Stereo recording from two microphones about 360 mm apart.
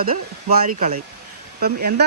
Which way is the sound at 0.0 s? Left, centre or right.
Right.